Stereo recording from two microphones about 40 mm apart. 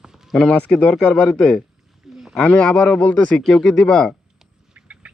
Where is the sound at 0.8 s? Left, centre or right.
Left.